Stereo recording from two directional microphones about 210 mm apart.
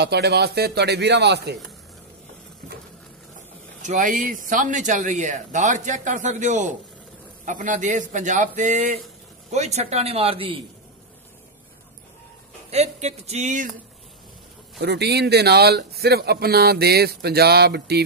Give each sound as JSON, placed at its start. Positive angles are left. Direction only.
{"t": 0.0, "sound": "a man's voice", "side_deg": -50}
{"t": 3.8, "sound": "speech", "side_deg": -35}
{"t": 12.7, "sound": "speech", "side_deg": -30}
{"t": 14.8, "sound": "a man's voice", "side_deg": -50}